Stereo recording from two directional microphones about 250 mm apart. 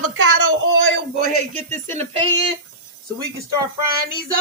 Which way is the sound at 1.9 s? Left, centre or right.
Right.